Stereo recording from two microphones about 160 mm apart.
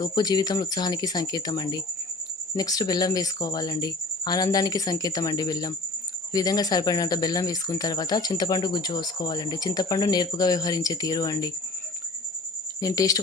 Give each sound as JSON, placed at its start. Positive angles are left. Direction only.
{"t": 0.0, "sound": "speech", "side_deg": 25}
{"t": 12.8, "sound": "speech", "side_deg": 20}